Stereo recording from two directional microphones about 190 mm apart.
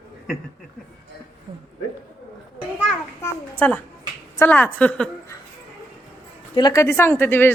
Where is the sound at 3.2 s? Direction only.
10° left (ahead or behind).